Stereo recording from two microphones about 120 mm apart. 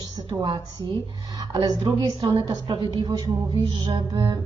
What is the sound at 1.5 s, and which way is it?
A woman's voice, 35° right (ahead or behind).